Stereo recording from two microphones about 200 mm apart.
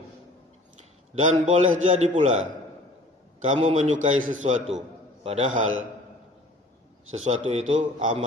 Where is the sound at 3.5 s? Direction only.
30° right (ahead or behind).